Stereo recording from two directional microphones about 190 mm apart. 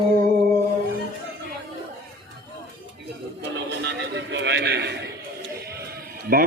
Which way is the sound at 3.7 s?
65° right (ahead or behind).